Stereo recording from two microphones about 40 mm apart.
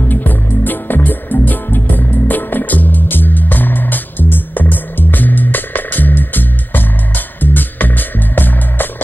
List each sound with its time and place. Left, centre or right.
0.0 s music: left